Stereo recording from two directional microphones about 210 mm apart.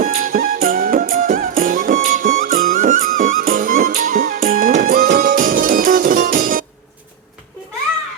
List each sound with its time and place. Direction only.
0.0 s music: 40° right (ahead or behind)